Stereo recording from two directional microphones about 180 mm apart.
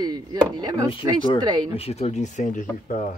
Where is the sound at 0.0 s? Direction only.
20° right (ahead or behind).